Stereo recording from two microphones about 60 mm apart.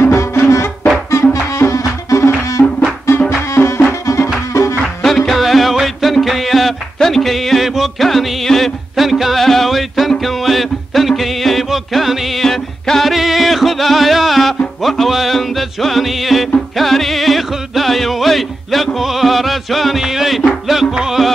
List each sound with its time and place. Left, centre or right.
0.0 s music: left
1.6 s music: left
3.3 s music: left
4.0 s music: left
5.0 s music: centre